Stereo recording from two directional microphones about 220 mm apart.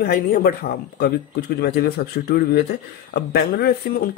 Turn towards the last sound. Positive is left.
turn(degrees=45)  # may be behind; listen again after turning